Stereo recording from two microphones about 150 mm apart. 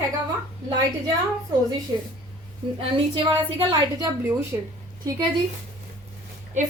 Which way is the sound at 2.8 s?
35° right (ahead or behind).